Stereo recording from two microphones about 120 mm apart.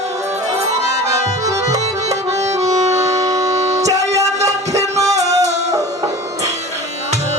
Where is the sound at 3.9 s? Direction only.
70° right (ahead or behind).